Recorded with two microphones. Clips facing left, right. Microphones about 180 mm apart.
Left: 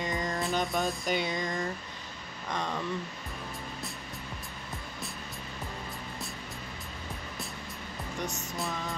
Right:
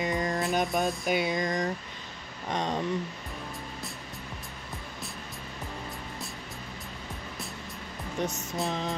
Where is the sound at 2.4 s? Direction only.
20° right (ahead or behind).